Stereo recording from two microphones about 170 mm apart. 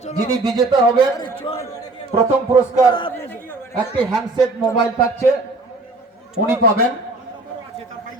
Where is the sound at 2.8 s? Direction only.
30° left (ahead or behind).